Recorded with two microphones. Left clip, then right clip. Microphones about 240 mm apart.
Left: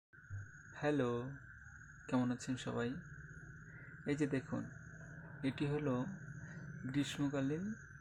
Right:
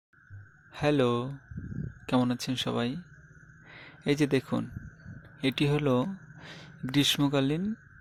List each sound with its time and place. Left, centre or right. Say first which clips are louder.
0.7 s speech: right 11 dB; right
4.0 s speech: right 12 dB; right